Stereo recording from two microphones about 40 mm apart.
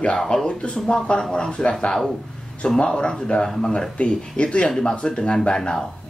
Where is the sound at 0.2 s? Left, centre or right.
Centre.